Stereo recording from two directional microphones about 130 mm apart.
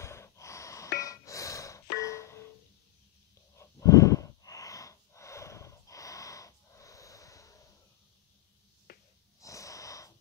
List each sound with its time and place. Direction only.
0.0 s gasp: 20° left (ahead or behind)
3.5 s snort: 25° left (ahead or behind)
9.4 s wheeze: 25° left (ahead or behind)